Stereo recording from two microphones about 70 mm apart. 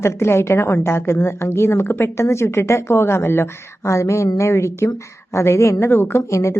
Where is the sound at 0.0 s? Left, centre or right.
Left.